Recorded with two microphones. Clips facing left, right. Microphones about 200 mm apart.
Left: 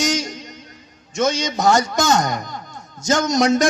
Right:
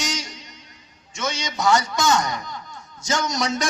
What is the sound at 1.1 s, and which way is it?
Speech, 45° left (ahead or behind).